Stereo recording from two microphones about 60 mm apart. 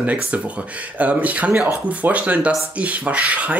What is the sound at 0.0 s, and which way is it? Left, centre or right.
Speech, right.